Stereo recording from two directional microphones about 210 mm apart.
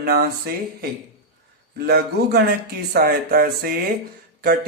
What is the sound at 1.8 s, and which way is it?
Speech, 50° right (ahead or behind).